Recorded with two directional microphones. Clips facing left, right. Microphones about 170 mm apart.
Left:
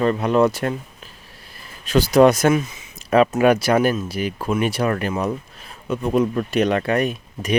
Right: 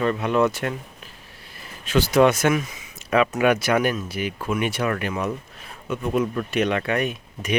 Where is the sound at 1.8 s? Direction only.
40° left (ahead or behind).